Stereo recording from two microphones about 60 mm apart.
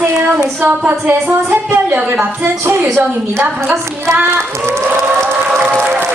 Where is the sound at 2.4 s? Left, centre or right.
Right.